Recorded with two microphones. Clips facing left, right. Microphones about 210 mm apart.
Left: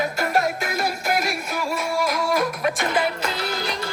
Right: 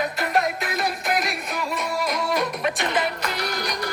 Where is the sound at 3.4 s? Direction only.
25° left (ahead or behind).